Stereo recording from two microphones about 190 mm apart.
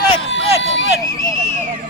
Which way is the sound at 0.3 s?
70° left (ahead or behind).